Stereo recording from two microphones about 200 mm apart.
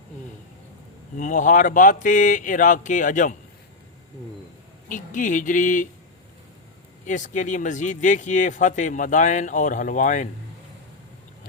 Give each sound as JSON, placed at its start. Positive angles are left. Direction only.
{"t": 1.1, "sound": "speech", "side_deg": 40}
{"t": 4.9, "sound": "speech", "side_deg": 40}
{"t": 7.0, "sound": "speech", "side_deg": 40}